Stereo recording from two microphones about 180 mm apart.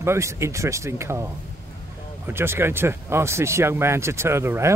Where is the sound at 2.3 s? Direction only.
15° right (ahead or behind).